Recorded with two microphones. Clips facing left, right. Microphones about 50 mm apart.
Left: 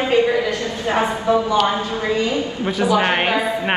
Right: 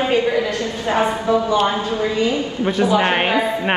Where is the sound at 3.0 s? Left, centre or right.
Centre.